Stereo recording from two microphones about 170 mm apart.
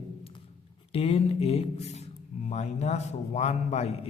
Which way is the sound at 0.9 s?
35° left (ahead or behind).